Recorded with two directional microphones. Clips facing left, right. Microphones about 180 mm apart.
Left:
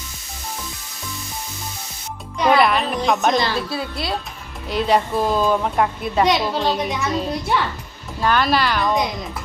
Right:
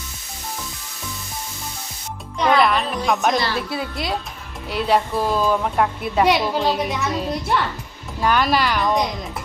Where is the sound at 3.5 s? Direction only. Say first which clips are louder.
Even; 15° right (ahead or behind).